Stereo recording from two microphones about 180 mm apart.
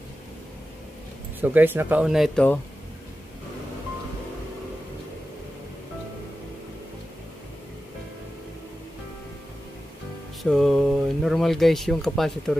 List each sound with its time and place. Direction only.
1.4 s speech: 10° right (ahead or behind); by 2.6 s 5° left (ahead or behind)
10.4 s speech: centre (ahead or behind)